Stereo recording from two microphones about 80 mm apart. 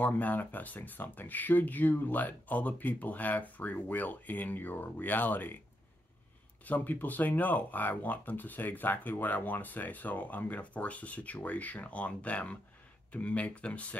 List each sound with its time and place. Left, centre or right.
0.0 s speech: left
6.6 s speech: left